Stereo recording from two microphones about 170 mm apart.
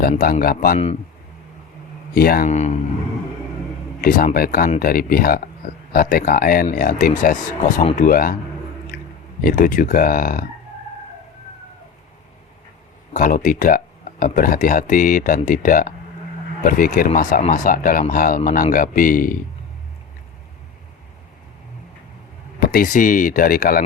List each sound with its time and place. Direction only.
0.1 s speech: 55° left (ahead or behind)
2.1 s speech: 60° left (ahead or behind)
2.5 s a man's voice: 40° left (ahead or behind)
4.0 s speech: 55° left (ahead or behind)
9.4 s speech: 50° left (ahead or behind)
13.1 s speech: 50° left (ahead or behind)
22.6 s speech: 55° left (ahead or behind)